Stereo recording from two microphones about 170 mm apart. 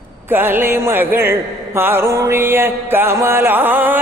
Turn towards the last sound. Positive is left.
turn(degrees=-10)  # may be behind; listen again after turning